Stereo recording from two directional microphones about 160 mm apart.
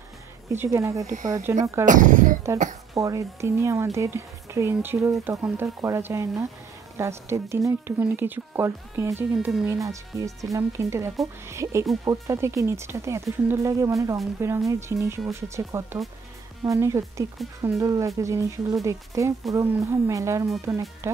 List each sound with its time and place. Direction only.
0.5 s speech: 15° right (ahead or behind)
1.9 s speech: 55° right (ahead or behind)
2.9 s speech: 20° right (ahead or behind)